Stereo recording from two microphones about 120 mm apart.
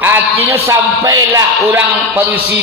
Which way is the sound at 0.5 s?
25° right (ahead or behind).